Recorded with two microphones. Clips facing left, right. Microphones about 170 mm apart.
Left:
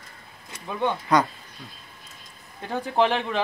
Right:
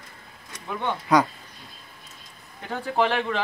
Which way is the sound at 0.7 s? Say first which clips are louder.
Left 3 dB; 15° left (ahead or behind).